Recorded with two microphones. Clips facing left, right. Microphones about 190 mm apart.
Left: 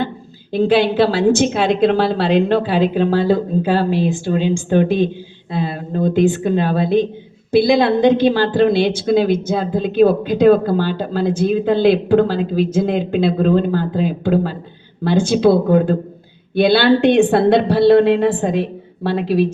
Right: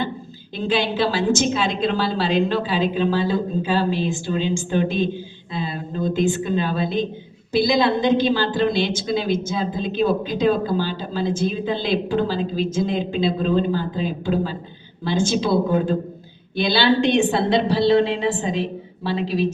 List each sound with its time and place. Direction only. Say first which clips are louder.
0.5 s a woman's voice: left 8 dB; 60° left (ahead or behind)